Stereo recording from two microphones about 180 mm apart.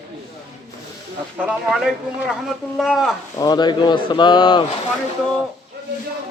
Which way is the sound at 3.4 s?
25° left (ahead or behind).